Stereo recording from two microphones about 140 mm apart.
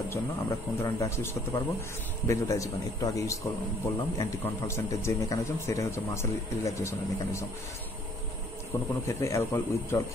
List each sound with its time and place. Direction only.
0.1 s speech: 20° left (ahead or behind)
9.0 s speech: 20° left (ahead or behind)